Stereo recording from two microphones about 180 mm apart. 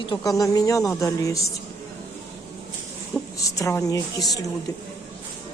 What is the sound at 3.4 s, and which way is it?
A woman's voice, 20° left (ahead or behind).